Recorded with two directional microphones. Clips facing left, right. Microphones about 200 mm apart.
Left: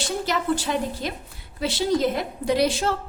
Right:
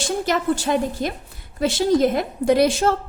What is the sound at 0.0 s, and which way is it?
A woman's voice, 45° right (ahead or behind).